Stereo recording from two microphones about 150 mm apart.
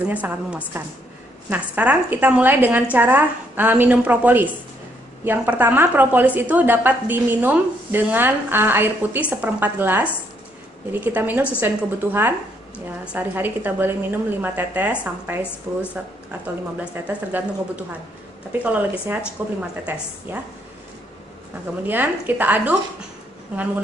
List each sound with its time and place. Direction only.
0.1 s a woman's voice: 10° right (ahead or behind)
15.7 s speech: 25° right (ahead or behind)
16.8 s a woman's voice: 10° right (ahead or behind)
21.8 s a woman's voice: 10° right (ahead or behind)